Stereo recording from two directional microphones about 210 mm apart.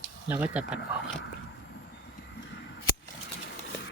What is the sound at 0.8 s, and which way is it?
Speech, 60° left (ahead or behind).